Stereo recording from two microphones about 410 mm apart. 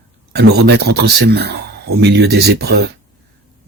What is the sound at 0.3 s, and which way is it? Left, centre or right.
Speech, right.